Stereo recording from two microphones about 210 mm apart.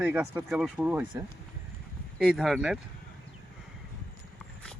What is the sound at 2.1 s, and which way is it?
Speech, centre (ahead or behind).